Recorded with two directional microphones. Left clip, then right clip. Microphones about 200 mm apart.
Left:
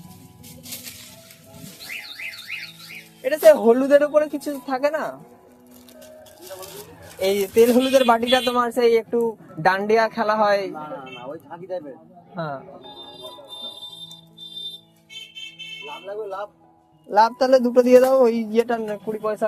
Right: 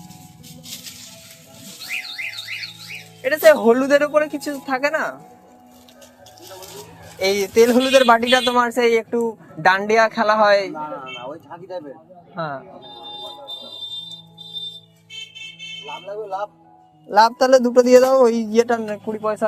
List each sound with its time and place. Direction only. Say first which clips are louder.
3.2 s speech: right 1 dB; 15° left (ahead or behind)
7.2 s speech: right 2 dB; 10° left (ahead or behind)
10.8 s a sound: right 4 dB; 35° left (ahead or behind)
12.3 s speech: right 2 dB; 15° left (ahead or behind)
15.9 s speech: right 3 dB; 25° left (ahead or behind)
17.1 s a man's voice: right 3 dB; centre (ahead or behind)